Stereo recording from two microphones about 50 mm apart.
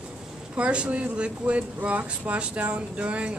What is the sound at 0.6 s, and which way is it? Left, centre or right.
Speech, right.